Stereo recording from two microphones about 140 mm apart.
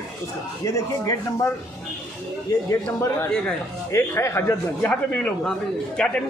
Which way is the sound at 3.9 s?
20° left (ahead or behind).